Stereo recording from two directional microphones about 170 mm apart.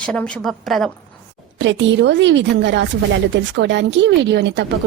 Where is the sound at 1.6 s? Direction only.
90° right.